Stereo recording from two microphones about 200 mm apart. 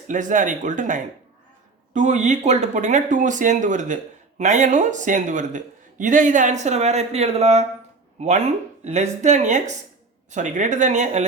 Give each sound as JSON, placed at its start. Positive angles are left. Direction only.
{"t": 0.1, "sound": "a man's voice", "side_deg": -40}